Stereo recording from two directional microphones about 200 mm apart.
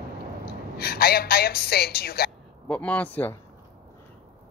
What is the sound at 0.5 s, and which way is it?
A woman's voice, 50° left (ahead or behind).